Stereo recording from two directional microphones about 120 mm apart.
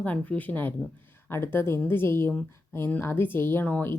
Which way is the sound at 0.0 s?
15° left (ahead or behind).